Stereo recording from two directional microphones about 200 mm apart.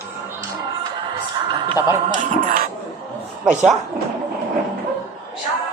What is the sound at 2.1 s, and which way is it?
Music, 45° right (ahead or behind).